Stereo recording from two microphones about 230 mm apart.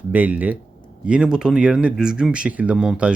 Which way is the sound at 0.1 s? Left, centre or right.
Centre.